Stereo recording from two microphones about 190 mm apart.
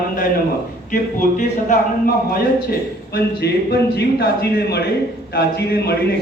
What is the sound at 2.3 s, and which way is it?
A man's voice, 55° left (ahead or behind).